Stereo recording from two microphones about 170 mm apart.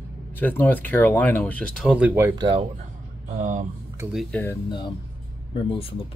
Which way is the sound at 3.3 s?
50° right (ahead or behind).